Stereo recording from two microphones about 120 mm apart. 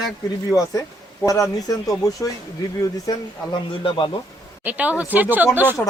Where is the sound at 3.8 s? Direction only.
45° left (ahead or behind).